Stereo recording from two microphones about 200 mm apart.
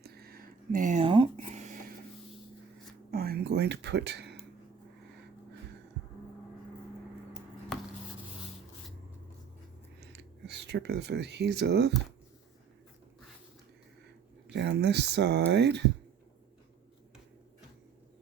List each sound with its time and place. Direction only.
0.0 s a sound: 50° right (ahead or behind)
3.1 s speech: 50° right (ahead or behind)
7.7 s chopping: centre (ahead or behind)
10.0 s speech: 55° right (ahead or behind)
14.5 s speech: 60° right (ahead or behind)